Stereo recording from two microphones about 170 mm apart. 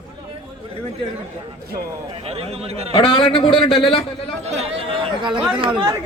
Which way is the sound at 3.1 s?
30° left (ahead or behind).